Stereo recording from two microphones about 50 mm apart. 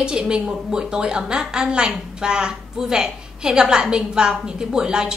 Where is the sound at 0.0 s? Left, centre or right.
Centre.